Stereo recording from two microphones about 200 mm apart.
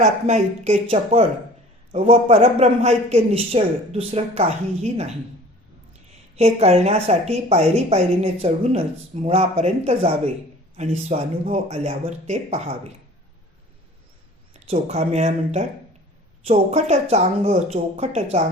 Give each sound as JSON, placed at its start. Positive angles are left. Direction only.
{"t": 0.0, "sound": "a man's voice", "side_deg": -35}
{"t": 6.3, "sound": "a man's voice", "side_deg": -35}
{"t": 14.5, "sound": "a man's voice", "side_deg": -35}